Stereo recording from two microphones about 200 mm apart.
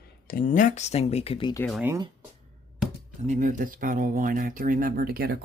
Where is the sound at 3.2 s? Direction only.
40° right (ahead or behind).